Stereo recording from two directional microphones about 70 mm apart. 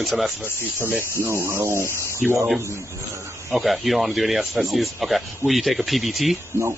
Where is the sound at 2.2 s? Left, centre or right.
Centre.